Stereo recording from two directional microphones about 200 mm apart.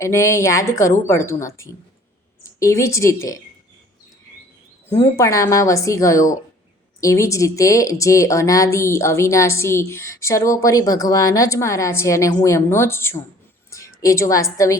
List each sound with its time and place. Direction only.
0.0 s a woman's voice: 15° left (ahead or behind)
4.9 s speech: 15° left (ahead or behind)
13.7 s a sound: 15° left (ahead or behind)